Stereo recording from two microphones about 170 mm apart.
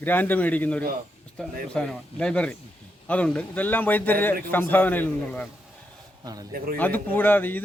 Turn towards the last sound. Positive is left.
turn(degrees=10)  # may be behind; listen again after turning